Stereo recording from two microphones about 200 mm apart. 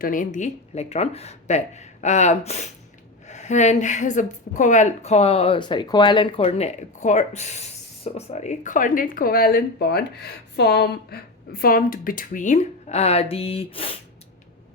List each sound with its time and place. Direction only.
0.0 s speech: 40° left (ahead or behind)